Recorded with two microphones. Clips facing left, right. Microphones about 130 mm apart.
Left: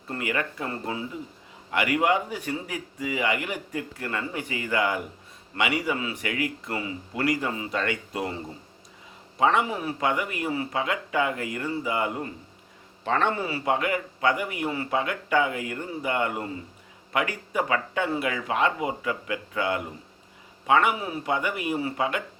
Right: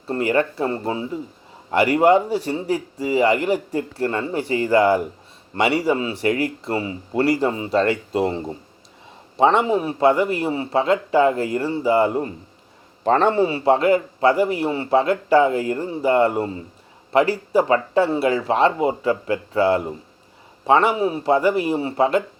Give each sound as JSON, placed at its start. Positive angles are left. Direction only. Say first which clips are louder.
{"t": 0.1, "sound": "a man's voice", "louder": "right 10 dB", "side_deg": -35}